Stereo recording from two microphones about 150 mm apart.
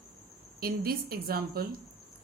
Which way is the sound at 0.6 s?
90° right.